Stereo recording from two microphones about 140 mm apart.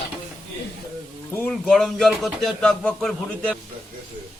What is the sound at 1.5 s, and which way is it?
Speech, 5° left (ahead or behind).